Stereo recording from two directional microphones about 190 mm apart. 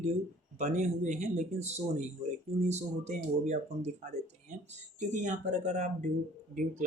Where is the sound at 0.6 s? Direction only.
40° right (ahead or behind).